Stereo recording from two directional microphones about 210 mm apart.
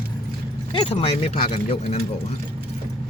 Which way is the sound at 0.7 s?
30° left (ahead or behind).